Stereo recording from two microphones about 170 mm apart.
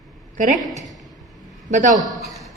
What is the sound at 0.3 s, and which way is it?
Speech, 50° right (ahead or behind).